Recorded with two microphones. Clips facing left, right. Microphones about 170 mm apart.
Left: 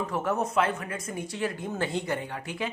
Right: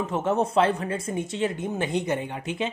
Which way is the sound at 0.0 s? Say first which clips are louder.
Right 4 dB; 25° right (ahead or behind).